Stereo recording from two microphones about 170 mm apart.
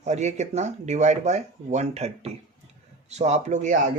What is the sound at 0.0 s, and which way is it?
Speech, 45° right (ahead or behind).